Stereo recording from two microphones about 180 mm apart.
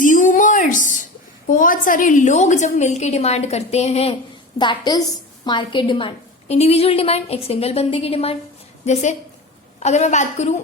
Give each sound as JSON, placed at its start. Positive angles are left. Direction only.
{"t": 0.0, "sound": "a sound", "side_deg": 45}
{"t": 1.5, "sound": "a woman's voice", "side_deg": 45}
{"t": 4.5, "sound": "a woman's voice", "side_deg": 25}